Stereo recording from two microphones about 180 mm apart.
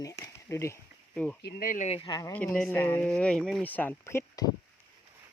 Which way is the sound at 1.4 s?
50° left (ahead or behind).